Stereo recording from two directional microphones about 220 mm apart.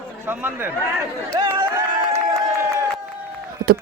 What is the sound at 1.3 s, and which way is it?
Chatter, 20° right (ahead or behind).